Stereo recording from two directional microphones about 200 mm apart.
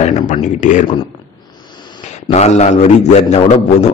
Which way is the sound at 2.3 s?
35° left (ahead or behind).